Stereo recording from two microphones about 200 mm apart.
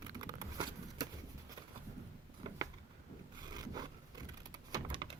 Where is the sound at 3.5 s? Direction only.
20° right (ahead or behind).